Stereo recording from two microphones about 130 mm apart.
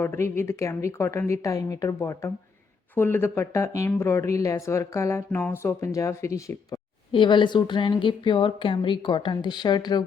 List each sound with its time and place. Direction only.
0.0 s speech: 20° left (ahead or behind)
7.1 s a woman's voice: 40° left (ahead or behind)